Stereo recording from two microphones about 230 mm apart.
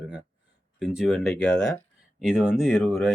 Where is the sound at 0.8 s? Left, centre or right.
Centre.